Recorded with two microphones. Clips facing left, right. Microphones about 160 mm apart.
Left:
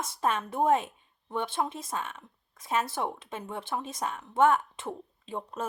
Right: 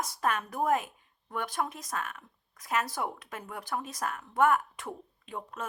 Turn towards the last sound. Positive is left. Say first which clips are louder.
# left 4 dB
turn(degrees=30)  # may be behind; listen again after turning